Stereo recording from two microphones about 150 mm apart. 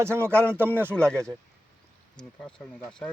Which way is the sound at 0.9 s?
5° left (ahead or behind).